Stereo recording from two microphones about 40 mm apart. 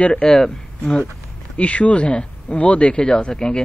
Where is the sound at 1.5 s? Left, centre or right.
Left.